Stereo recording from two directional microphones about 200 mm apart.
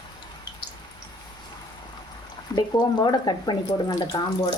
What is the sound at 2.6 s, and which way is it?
Speech, 20° left (ahead or behind).